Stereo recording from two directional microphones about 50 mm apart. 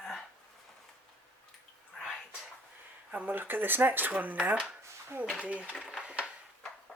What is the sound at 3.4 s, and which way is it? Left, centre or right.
Speech, right.